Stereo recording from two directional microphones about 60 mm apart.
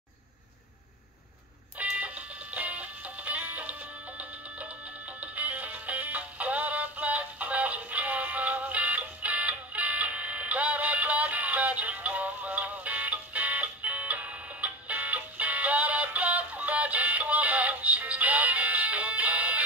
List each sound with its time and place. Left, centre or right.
1.8 s music: right
5.2 s music: right